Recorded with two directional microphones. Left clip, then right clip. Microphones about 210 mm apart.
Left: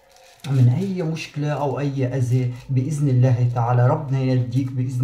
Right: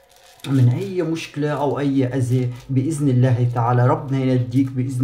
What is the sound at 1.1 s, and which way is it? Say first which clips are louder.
Speech: right 3 dB; 40° right (ahead or behind).